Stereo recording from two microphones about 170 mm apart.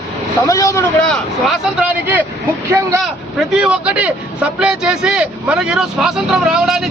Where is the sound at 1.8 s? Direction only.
10° right (ahead or behind).